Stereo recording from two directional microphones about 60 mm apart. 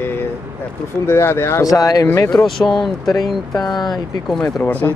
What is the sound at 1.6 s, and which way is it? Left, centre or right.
Speech, left.